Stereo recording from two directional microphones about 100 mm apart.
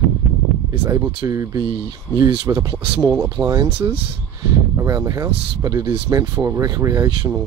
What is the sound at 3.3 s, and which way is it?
Speech, 35° right (ahead or behind).